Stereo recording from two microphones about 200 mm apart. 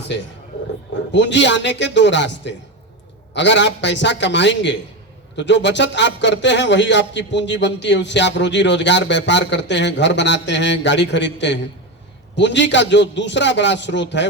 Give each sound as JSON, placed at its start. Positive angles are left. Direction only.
{"t": 1.1, "sound": "a man's voice", "side_deg": 65}